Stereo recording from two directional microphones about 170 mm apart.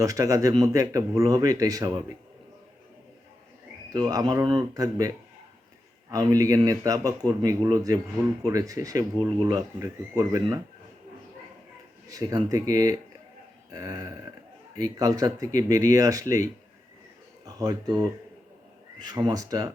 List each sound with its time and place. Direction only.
0.0 s speech: 20° right (ahead or behind)
3.9 s speech: 25° right (ahead or behind)
12.0 s speech: 20° right (ahead or behind)
13.7 s a sound: 20° right (ahead or behind)
14.8 s speech: 20° right (ahead or behind)